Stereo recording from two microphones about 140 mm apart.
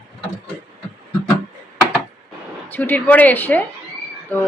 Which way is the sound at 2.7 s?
15° left (ahead or behind).